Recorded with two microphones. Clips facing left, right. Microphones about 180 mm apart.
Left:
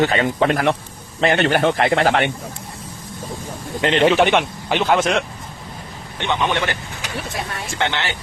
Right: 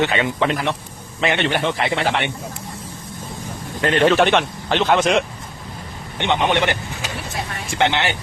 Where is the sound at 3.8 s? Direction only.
20° left (ahead or behind).